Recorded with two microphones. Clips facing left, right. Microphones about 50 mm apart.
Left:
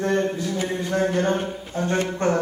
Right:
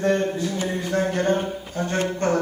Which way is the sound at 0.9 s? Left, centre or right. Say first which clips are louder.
Even; left.